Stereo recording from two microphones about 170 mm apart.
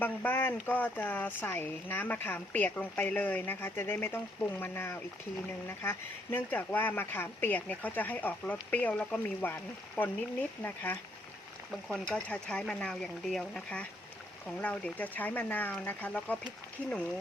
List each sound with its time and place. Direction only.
0.0 s speech: 10° left (ahead or behind)
12.0 s speech: 5° left (ahead or behind)